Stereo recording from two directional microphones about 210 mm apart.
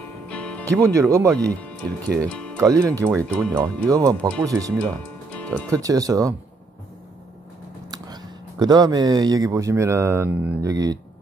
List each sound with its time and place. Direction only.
0.3 s music: 5° left (ahead or behind)
0.8 s speech: 15° right (ahead or behind)
2.2 s speech: 5° left (ahead or behind)
2.6 s speech: 15° right (ahead or behind)
3.3 s speech: 5° left (ahead or behind)
3.5 s speech: 15° right (ahead or behind)
4.9 s music: 5° left (ahead or behind)
5.7 s speech: 15° right (ahead or behind)
7.9 s speech: 20° right (ahead or behind)